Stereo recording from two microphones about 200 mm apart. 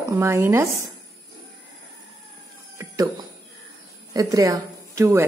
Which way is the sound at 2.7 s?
15° right (ahead or behind).